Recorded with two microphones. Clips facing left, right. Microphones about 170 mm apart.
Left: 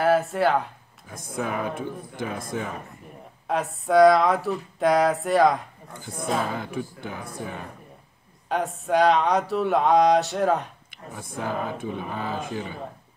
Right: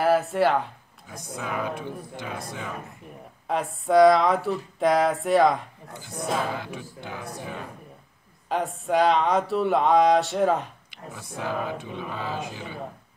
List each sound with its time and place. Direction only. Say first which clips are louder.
0.0 s speech: even; centre (ahead or behind)
1.1 s speech: left 3 dB; 50° left (ahead or behind)
3.4 s a sound: even; centre (ahead or behind)
6.5 s speech: left 3 dB; 50° left (ahead or behind)
8.5 s a sound: left 1 dB; centre (ahead or behind)
11.1 s speech: left 1 dB; 50° left (ahead or behind)